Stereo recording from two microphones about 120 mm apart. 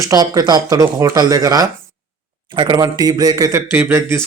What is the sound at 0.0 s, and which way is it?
Speech, 35° right (ahead or behind).